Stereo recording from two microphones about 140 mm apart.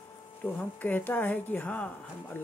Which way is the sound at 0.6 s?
10° left (ahead or behind).